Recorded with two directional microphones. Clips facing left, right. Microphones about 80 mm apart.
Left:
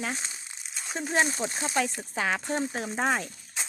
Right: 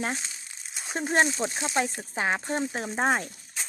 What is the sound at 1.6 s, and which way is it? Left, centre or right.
A woman's voice, right.